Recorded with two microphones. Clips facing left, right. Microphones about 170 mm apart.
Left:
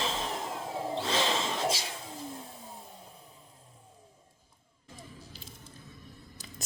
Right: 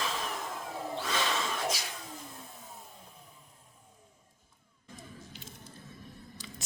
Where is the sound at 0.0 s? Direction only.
25° left (ahead or behind).